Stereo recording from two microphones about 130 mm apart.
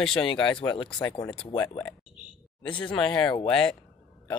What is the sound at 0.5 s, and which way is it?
Speech, 40° left (ahead or behind).